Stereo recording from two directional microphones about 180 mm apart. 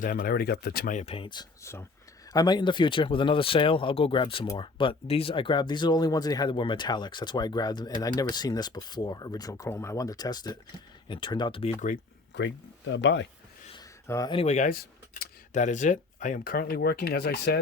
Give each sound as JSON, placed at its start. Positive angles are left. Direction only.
{"t": 0.0, "sound": "speech", "side_deg": 55}
{"t": 0.9, "sound": "speech", "side_deg": 35}
{"t": 12.3, "sound": "speech", "side_deg": 80}
{"t": 14.1, "sound": "speech", "side_deg": 20}
{"t": 14.3, "sound": "speech", "side_deg": 40}